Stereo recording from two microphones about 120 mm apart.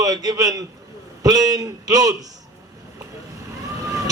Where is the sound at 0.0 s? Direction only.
30° right (ahead or behind).